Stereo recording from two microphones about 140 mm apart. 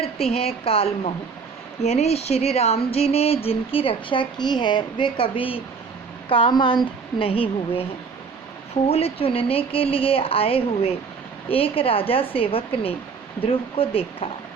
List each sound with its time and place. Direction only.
0.0 s a woman's voice: 45° left (ahead or behind)
8.9 s a woman's voice: 45° left (ahead or behind)